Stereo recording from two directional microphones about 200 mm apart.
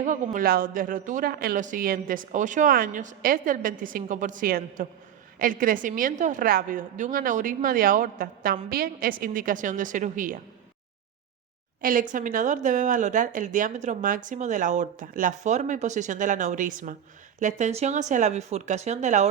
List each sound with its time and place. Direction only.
0.0 s speech: 40° right (ahead or behind)
11.8 s speech: 45° right (ahead or behind)